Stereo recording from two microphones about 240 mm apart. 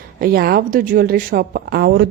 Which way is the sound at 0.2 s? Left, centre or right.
Right.